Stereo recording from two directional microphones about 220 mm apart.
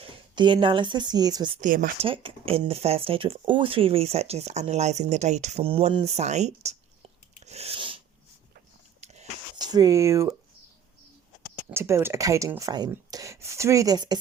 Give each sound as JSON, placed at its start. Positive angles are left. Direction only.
{"t": 0.0, "sound": "speech", "side_deg": -20}
{"t": 1.6, "sound": "speech", "side_deg": -35}
{"t": 2.0, "sound": "speech", "side_deg": -25}
{"t": 7.4, "sound": "sneeze", "side_deg": -30}
{"t": 9.0, "sound": "a sound", "side_deg": -30}
{"t": 9.6, "sound": "speech", "side_deg": -15}
{"t": 11.7, "sound": "speech", "side_deg": -10}